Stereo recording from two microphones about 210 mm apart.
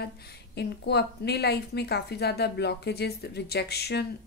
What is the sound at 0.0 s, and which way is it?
A woman's voice, 50° left (ahead or behind).